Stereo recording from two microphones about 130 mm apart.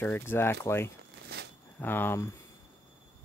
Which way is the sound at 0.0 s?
15° left (ahead or behind).